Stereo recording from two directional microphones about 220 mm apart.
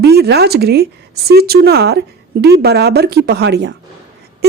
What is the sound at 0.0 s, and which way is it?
Speech, 50° right (ahead or behind).